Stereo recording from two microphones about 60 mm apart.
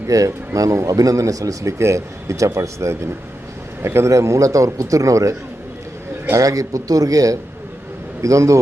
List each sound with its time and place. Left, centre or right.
0.1 s a man's voice: right
1.8 s a man's voice: right
3.8 s a man's voice: right
4.1 s a man's voice: right
8.2 s a man's voice: right